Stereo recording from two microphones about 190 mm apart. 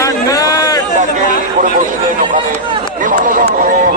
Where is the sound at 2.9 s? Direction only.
45° right (ahead or behind).